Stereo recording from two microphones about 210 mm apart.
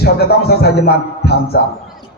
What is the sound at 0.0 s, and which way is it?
Speech, 50° left (ahead or behind).